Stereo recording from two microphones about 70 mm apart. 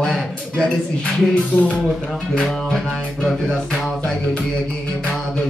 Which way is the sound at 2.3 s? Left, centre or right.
Centre.